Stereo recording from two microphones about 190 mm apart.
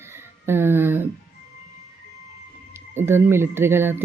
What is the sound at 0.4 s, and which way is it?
Speech, 10° right (ahead or behind).